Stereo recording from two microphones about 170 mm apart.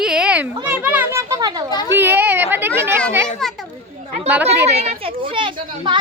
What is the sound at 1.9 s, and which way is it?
Children playing, 10° right (ahead or behind).